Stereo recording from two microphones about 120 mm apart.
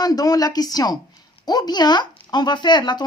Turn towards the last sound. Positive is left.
turn(degrees=40)  # may be behind; listen again after turning